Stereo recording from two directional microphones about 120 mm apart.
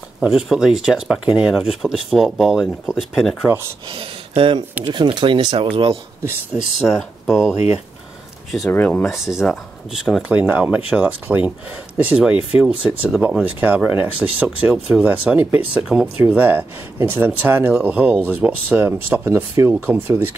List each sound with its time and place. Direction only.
0.2 s speech: 5° right (ahead or behind)
4.4 s speech: 45° right (ahead or behind)
6.9 s speech: 5° right (ahead or behind)
8.6 s speech: 15° left (ahead or behind)
9.0 s speech: centre (ahead or behind)